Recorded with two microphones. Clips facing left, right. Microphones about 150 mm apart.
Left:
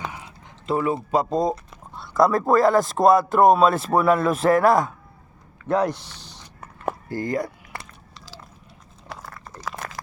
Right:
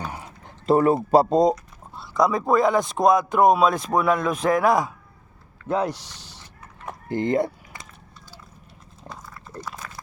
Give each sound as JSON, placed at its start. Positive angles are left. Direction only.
{"t": 0.0, "sound": "a sound", "side_deg": -40}
{"t": 2.0, "sound": "speech", "side_deg": 0}
{"t": 5.6, "sound": "speech", "side_deg": -10}
{"t": 7.1, "sound": "speech", "side_deg": -25}
{"t": 7.7, "sound": "a sound", "side_deg": 70}
{"t": 8.1, "sound": "biting", "side_deg": 90}
{"t": 9.0, "sound": "dog", "side_deg": 75}